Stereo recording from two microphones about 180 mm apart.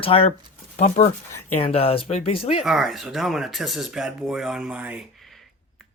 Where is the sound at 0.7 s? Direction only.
45° left (ahead or behind).